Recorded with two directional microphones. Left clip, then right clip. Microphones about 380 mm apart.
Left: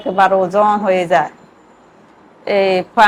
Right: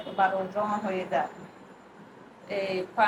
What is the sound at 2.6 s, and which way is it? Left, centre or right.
Speech, left.